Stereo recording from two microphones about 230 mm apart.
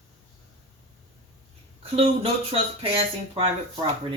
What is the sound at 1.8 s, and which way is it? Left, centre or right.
Speech, right.